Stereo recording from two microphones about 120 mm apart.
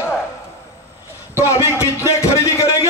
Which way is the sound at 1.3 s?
25° left (ahead or behind).